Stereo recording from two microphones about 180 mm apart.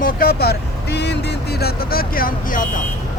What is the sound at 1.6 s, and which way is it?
Speech, 55° left (ahead or behind).